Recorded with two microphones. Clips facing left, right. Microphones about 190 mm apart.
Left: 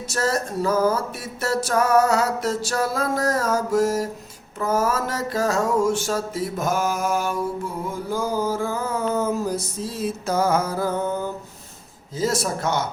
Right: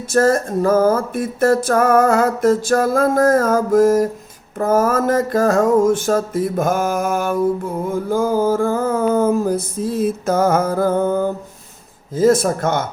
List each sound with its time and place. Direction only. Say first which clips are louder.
0.1 s music: right 9 dB; 50° right (ahead or behind)